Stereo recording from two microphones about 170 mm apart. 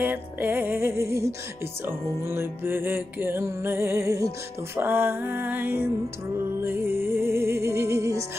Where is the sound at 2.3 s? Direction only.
15° right (ahead or behind).